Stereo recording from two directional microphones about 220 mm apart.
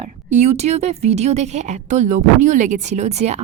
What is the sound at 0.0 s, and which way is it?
A woman's voice, 30° right (ahead or behind).